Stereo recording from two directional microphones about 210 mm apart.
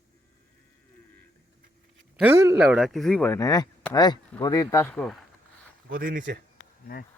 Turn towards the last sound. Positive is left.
turn(degrees=-40)  # may be behind; listen again after turning